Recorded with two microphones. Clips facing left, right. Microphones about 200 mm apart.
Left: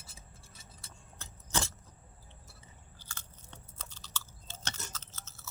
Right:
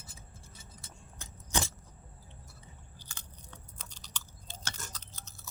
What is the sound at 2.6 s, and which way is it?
Chewing, 15° right (ahead or behind).